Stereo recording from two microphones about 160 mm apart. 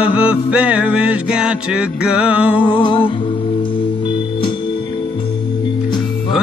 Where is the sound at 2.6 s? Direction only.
30° left (ahead or behind).